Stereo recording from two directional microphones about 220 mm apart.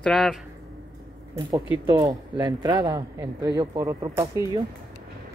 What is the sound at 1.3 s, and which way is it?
Speech, 20° right (ahead or behind).